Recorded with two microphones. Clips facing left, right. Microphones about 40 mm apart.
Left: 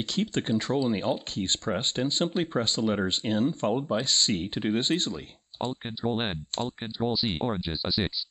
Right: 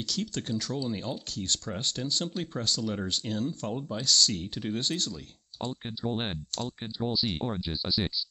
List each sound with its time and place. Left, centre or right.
0.0 s speech: left